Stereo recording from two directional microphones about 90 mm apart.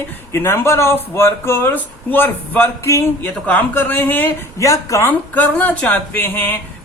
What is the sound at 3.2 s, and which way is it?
Speech, 20° left (ahead or behind).